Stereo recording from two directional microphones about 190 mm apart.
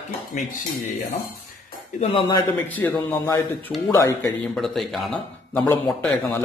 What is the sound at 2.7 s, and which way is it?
Speech, 10° left (ahead or behind).